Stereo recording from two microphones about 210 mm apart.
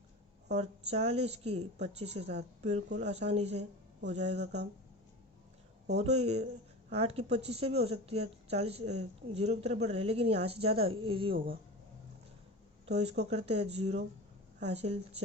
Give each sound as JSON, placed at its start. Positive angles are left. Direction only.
{"t": 0.5, "sound": "speech", "side_deg": -30}
{"t": 4.4, "sound": "speech", "side_deg": -55}
{"t": 6.0, "sound": "speech", "side_deg": -30}
{"t": 12.8, "sound": "speech", "side_deg": -30}